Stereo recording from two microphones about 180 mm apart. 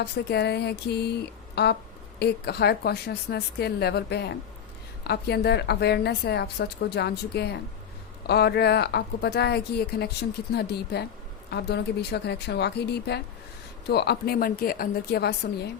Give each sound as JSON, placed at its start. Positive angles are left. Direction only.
{"t": 0.0, "sound": "speech", "side_deg": 65}